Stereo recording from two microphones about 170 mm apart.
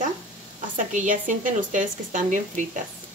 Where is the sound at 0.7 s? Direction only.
50° right (ahead or behind).